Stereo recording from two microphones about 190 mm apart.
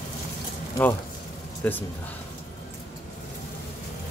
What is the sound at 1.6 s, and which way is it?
Speech, 10° left (ahead or behind).